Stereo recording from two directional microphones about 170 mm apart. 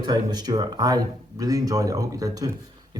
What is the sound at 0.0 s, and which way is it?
Speech, 25° right (ahead or behind).